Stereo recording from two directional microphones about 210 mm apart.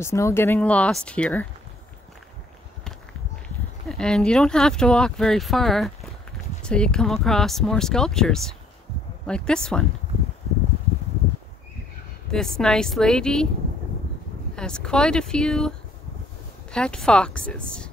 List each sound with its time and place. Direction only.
0.0 s speech: 15° left (ahead or behind)
3.9 s speech: 5° left (ahead or behind)
12.3 s speech: 5° left (ahead or behind)
14.5 s speech: 5° left (ahead or behind)
16.7 s speech: 5° left (ahead or behind)